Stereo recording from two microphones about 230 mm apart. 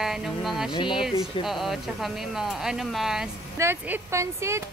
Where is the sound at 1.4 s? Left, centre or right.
Centre.